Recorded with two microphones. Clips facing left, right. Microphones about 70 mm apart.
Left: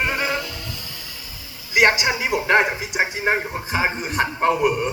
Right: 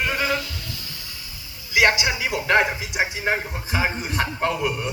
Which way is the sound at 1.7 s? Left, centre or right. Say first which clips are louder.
Left 2 dB; left.